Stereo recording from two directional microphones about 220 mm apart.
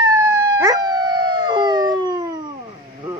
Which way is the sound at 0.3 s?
15° right (ahead or behind).